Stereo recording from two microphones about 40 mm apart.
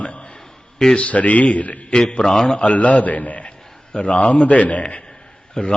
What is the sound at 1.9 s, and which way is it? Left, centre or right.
Speech, centre.